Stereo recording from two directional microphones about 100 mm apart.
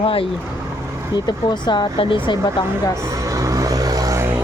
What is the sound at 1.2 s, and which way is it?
Speech, 50° left (ahead or behind).